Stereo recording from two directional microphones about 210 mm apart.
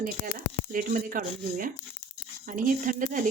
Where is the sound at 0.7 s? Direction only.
40° right (ahead or behind).